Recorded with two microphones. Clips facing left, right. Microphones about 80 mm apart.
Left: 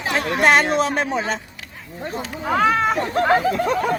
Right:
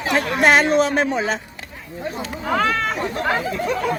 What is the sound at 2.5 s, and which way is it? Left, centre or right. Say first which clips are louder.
Speech: left 3 dB; centre.